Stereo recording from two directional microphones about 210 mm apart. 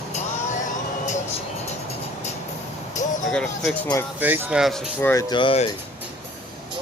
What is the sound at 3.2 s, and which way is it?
Speech, centre (ahead or behind).